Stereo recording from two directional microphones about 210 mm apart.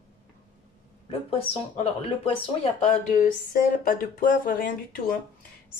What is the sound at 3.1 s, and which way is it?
Speech, 45° left (ahead or behind).